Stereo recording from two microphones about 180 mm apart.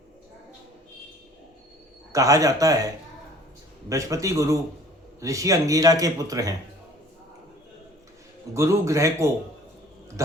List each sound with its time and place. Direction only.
2.1 s speech: 20° right (ahead or behind)
3.8 s speech: 15° right (ahead or behind)
8.5 s speech: 15° right (ahead or behind)